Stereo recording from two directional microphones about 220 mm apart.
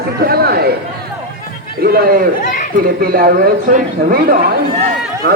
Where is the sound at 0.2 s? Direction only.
45° right (ahead or behind).